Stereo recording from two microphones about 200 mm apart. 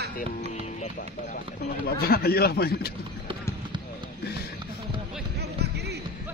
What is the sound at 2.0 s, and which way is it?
Speech, 50° left (ahead or behind).